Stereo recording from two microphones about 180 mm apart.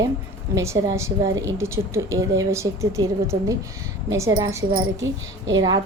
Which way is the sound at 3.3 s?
25° right (ahead or behind).